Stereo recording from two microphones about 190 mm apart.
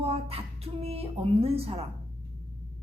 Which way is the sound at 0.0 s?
30° right (ahead or behind).